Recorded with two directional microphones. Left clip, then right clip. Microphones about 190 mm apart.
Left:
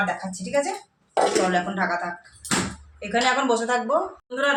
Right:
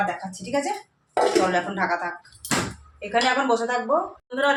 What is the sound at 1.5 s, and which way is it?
Speech, 15° right (ahead or behind).